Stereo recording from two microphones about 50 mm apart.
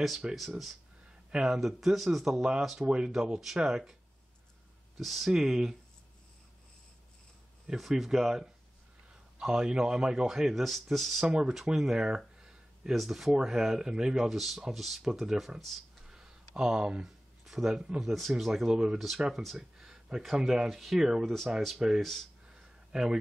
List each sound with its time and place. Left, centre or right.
0.2 s speech: centre
2.8 s speech: centre
5.0 s speech: centre
7.6 s speech: centre
11.2 s speech: centre
11.6 s a sound: centre
12.9 s speech: centre
16.0 s a sound: centre
17.0 s a sound: centre
18.0 s speech: centre
18.7 s speech: centre
19.4 s speech: centre
22.5 s a sound: centre